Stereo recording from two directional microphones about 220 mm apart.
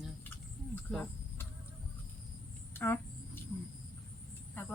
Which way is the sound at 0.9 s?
5° left (ahead or behind).